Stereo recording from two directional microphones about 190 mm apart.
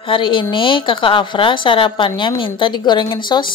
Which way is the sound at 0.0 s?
25° left (ahead or behind).